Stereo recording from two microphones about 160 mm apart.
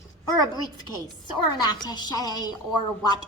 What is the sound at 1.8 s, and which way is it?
Speech, 25° left (ahead or behind).